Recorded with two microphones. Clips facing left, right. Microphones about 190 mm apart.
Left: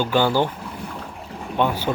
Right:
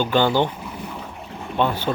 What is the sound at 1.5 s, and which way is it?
Speech, 10° left (ahead or behind).